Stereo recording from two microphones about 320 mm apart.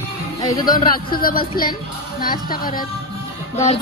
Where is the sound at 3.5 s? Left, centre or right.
Centre.